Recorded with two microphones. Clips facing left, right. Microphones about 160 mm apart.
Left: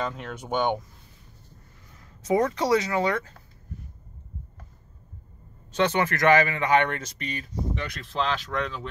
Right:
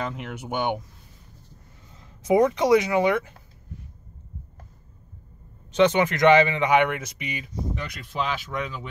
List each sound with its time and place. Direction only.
0.1 s speech: 10° right (ahead or behind)
1.9 s speech: 20° right (ahead or behind)
5.8 s speech: 15° right (ahead or behind)